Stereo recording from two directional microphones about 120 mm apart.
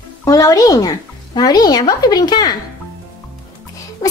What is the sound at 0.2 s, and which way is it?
Speech, 30° left (ahead or behind).